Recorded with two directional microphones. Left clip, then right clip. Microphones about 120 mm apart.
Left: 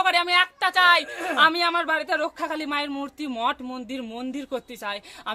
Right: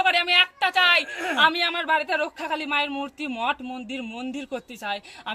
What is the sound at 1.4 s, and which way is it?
Speech, 30° left (ahead or behind).